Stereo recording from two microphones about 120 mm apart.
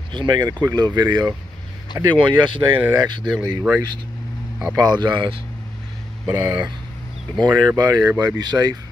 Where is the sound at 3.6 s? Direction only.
20° right (ahead or behind).